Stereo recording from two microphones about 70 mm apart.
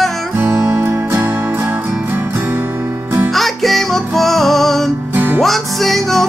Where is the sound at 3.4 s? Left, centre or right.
Centre.